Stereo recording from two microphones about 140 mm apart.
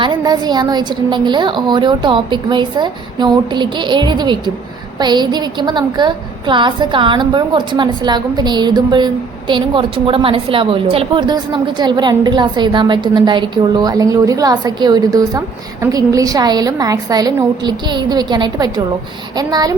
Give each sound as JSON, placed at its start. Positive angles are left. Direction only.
{"t": 0.0, "sound": "a woman's voice", "side_deg": -30}